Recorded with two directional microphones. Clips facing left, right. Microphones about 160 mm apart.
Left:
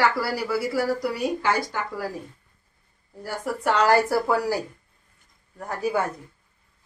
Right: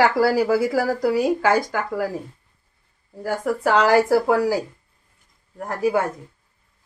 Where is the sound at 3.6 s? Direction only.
90° right.